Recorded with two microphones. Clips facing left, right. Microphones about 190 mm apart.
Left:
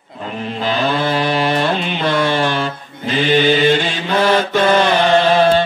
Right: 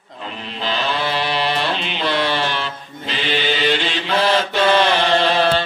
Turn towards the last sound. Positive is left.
turn(degrees=45)  # may be behind; listen again after turning